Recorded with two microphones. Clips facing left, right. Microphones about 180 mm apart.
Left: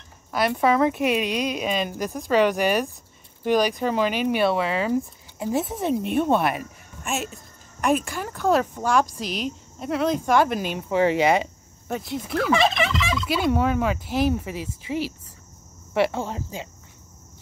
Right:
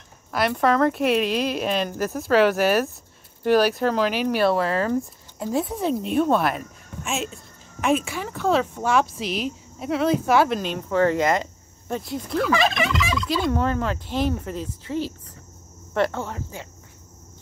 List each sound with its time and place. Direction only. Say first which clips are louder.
0.3 s speech: even; centre (ahead or behind)
10.5 s speech: right 1 dB; 10° left (ahead or behind)
12.4 s fowl: left 2 dB; 25° left (ahead or behind)
13.2 s speech: left 2 dB; 5° left (ahead or behind)